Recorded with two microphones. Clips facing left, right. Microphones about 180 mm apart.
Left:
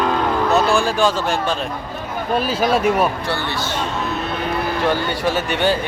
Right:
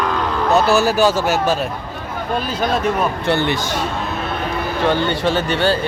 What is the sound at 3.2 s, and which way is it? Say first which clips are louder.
Speech: right 6 dB; 20° right (ahead or behind).